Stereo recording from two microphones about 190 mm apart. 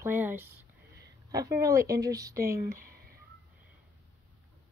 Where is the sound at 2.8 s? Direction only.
50° right (ahead or behind).